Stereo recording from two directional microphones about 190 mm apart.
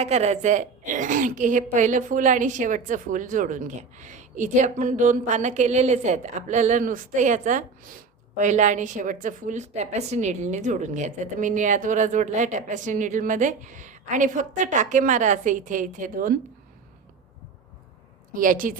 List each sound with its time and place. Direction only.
0.0 s a woman's voice: 35° right (ahead or behind)
18.3 s a woman's voice: 45° right (ahead or behind)